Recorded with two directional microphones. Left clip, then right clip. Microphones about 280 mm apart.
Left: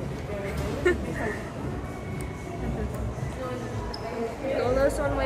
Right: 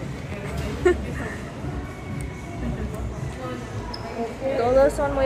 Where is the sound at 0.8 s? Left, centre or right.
Centre.